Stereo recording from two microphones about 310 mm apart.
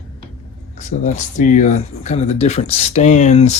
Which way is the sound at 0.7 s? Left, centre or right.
Left.